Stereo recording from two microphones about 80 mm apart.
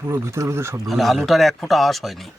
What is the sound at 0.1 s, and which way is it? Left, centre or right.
Speech, right.